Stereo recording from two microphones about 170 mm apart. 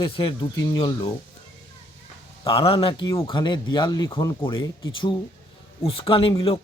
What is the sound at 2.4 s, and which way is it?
Speech, 30° left (ahead or behind).